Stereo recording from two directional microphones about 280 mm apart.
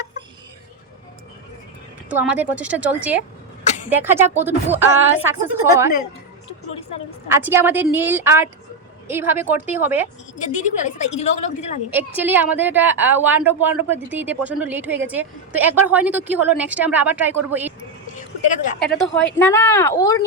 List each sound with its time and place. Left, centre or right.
2.0 s a woman's voice: centre
7.3 s a woman's voice: centre
10.3 s a woman's voice: left
11.9 s a woman's voice: centre
18.8 s a woman's voice: left
19.0 s speech: centre